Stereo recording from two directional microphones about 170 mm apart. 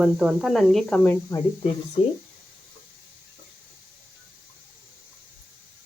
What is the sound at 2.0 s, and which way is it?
Speech, 35° left (ahead or behind).